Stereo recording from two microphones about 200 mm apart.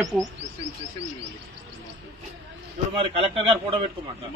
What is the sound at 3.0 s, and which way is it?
Speech, 30° right (ahead or behind).